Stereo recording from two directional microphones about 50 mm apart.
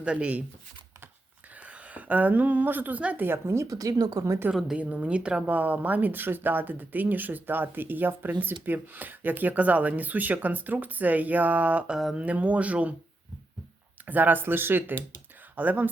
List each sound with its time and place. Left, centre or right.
0.0 s speech: right
1.6 s speech: right
3.2 s speech: right
4.4 s a woman's voice: right
4.8 s speech: right
5.5 s speech: right
14.1 s speech: right